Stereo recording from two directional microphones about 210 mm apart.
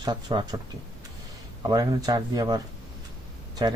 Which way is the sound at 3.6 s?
20° right (ahead or behind).